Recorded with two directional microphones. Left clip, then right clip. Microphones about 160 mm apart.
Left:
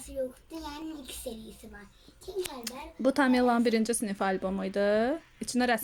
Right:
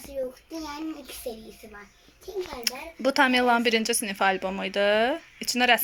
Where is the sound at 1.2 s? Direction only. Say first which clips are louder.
Right 5 dB; 15° left (ahead or behind).